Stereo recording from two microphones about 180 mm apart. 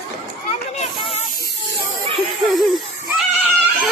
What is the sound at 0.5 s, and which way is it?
Children playing, 35° left (ahead or behind).